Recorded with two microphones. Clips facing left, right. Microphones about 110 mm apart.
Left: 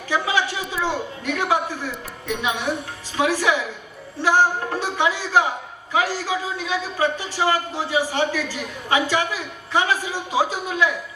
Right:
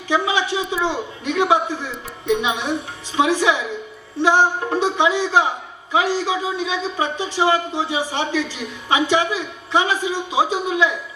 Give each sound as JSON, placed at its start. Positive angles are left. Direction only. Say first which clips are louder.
{"t": 0.1, "sound": "a man's voice", "louder": "right 3 dB", "side_deg": -20}